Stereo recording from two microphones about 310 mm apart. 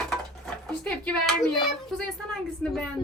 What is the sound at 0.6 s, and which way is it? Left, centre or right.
A child's voice, centre.